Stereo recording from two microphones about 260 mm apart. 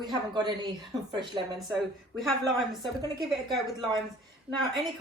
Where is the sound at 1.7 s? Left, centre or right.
Centre.